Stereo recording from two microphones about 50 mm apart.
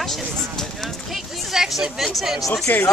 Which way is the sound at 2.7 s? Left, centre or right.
Left.